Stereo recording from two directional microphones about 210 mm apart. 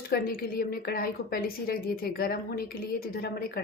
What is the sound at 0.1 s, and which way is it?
A woman's voice, 45° left (ahead or behind).